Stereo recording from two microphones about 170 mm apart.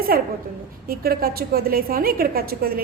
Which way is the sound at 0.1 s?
60° right (ahead or behind).